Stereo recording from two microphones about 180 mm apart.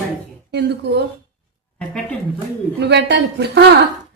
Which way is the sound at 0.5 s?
70° right (ahead or behind).